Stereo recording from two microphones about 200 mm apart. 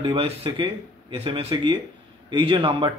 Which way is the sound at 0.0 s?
30° right (ahead or behind).